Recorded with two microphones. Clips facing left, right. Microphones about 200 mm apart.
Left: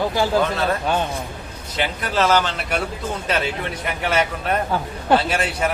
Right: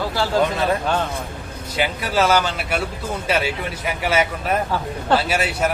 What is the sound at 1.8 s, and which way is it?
A man's voice, 10° right (ahead or behind).